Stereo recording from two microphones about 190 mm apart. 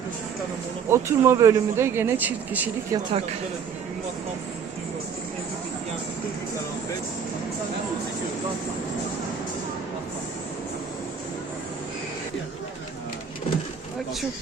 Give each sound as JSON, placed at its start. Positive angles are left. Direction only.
{"t": 0.9, "sound": "speech", "side_deg": -15}
{"t": 2.9, "sound": "speech", "side_deg": -30}